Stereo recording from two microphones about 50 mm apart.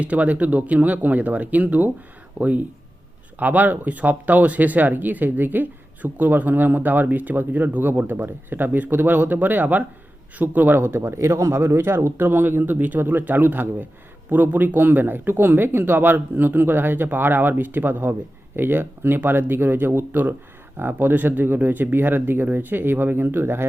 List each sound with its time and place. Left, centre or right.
0.0 s speech: right
10.8 s speech: right
11.0 s speech: right